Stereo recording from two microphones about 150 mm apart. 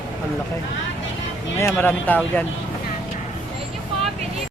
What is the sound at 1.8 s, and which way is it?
Speech, 10° left (ahead or behind).